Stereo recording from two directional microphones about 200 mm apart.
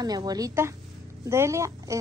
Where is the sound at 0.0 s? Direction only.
20° right (ahead or behind).